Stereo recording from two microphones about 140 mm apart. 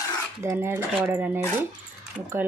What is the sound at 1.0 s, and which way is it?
Speech, 10° right (ahead or behind).